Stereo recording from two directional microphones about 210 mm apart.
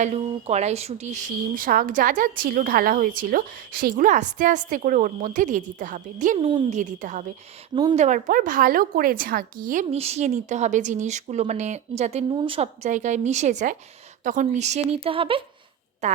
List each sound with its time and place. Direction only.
0.0 s a woman's voice: 30° right (ahead or behind)